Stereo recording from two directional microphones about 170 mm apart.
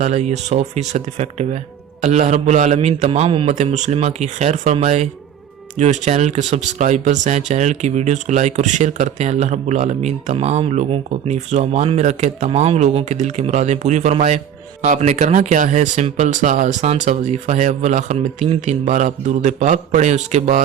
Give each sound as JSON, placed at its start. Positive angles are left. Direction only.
{"t": 0.0, "sound": "speech", "side_deg": -40}
{"t": 3.5, "sound": "speech", "side_deg": -45}